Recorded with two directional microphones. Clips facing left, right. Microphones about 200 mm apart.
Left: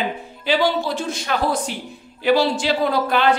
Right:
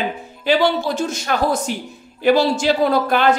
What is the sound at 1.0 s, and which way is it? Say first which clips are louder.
Speech: right 3 dB; 45° right (ahead or behind).